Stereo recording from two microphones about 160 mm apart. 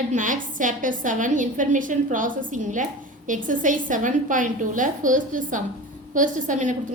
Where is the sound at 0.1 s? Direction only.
55° right (ahead or behind).